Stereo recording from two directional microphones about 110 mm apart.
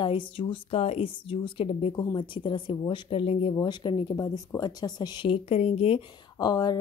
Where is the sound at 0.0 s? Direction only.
50° left (ahead or behind).